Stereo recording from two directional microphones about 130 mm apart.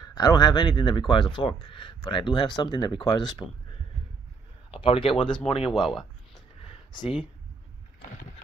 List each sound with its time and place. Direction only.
0.0 s speech: 30° left (ahead or behind)
4.6 s speech: 45° left (ahead or behind)
5.7 s speech: centre (ahead or behind)
6.9 s speech: 35° left (ahead or behind)